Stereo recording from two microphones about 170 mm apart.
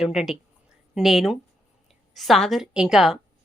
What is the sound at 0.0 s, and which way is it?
Speech, centre (ahead or behind).